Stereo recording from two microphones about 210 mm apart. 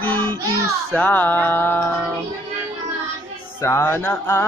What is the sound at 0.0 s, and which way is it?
Child singing, 10° left (ahead or behind).